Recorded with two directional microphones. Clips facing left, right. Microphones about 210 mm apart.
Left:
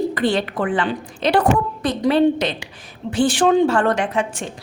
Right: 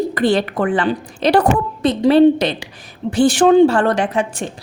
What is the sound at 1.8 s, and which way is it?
A woman's voice, 25° right (ahead or behind).